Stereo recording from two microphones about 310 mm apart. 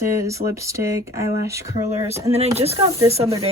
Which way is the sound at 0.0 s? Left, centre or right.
Centre.